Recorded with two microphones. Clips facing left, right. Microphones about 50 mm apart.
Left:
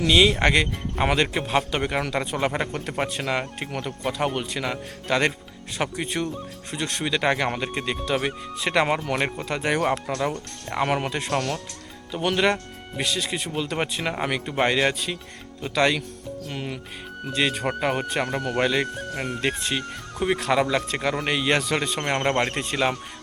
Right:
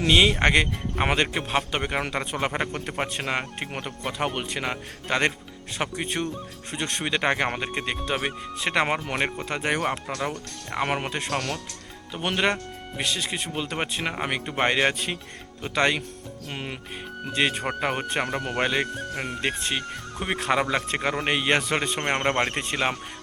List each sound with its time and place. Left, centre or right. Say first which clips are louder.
0.1 s a man's voice: even; centre
1.3 s a man's voice: left 2 dB; centre
3.7 s a man's voice: left 3 dB; right
17.3 s a man's voice: even; centre
17.7 s a man's voice: left 2 dB; centre
18.6 s speech: left 2 dB; centre
19.1 s a man's voice: left 3 dB; centre